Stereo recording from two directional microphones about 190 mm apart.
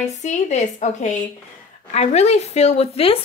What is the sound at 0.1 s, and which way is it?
Speech, 40° left (ahead or behind).